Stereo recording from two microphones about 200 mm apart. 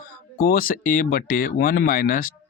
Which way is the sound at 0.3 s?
50° left (ahead or behind).